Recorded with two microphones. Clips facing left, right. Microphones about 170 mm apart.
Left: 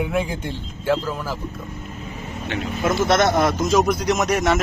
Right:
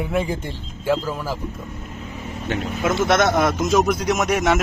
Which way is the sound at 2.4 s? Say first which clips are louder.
Right 2 dB; 40° right (ahead or behind).